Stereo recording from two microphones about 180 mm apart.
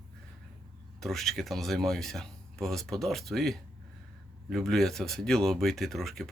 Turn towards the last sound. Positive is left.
turn(degrees=0)  # may be behind; listen again after turning